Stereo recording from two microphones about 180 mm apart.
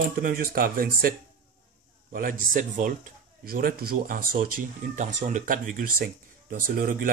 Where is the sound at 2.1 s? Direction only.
50° right (ahead or behind).